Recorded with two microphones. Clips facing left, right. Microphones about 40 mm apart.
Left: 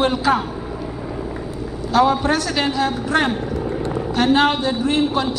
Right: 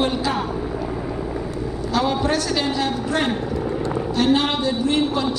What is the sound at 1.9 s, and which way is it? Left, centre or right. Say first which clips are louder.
A man's voice: left 5 dB; left.